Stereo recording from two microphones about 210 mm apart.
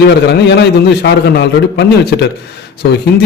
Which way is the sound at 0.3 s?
55° left (ahead or behind).